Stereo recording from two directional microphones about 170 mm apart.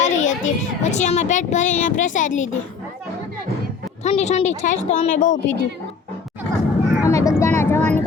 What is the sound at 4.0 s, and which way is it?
A woman's voice, 40° left (ahead or behind).